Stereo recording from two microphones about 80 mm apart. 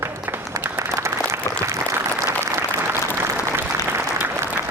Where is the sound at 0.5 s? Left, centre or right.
Right.